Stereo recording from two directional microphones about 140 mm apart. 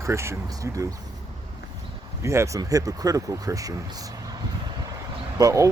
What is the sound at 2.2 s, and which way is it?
Speech, 20° right (ahead or behind).